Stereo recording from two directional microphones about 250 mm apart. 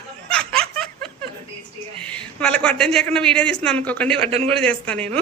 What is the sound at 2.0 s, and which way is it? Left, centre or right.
A woman's voice, centre.